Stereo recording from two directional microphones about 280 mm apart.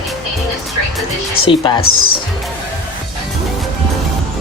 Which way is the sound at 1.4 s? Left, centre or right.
Centre.